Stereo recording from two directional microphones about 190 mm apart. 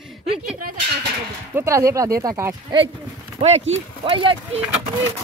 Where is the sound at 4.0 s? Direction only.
25° right (ahead or behind).